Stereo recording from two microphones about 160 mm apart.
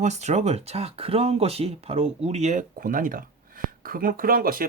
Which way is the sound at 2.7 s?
60° right (ahead or behind).